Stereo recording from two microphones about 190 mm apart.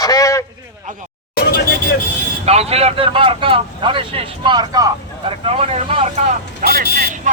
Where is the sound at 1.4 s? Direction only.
50° left (ahead or behind).